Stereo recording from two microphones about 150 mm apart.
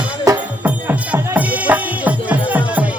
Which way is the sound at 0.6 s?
10° right (ahead or behind).